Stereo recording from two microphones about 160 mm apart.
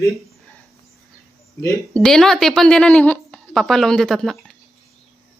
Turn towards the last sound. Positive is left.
turn(degrees=0)  # may be behind; listen again after turning